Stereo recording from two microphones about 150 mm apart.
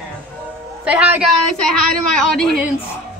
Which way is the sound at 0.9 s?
10° right (ahead or behind).